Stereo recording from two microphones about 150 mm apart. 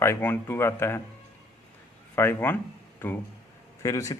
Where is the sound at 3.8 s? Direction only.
20° left (ahead or behind).